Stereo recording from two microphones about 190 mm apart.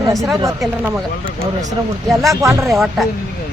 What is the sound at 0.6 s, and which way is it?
Speech, 5° right (ahead or behind).